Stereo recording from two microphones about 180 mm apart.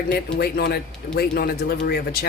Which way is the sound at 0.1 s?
55° left (ahead or behind).